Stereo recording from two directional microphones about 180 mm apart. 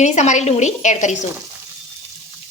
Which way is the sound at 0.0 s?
40° left (ahead or behind).